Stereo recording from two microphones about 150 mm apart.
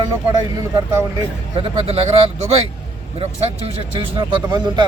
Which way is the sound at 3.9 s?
30° right (ahead or behind).